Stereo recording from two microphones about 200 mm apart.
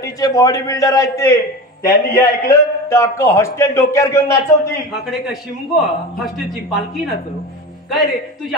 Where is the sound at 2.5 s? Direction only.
15° left (ahead or behind).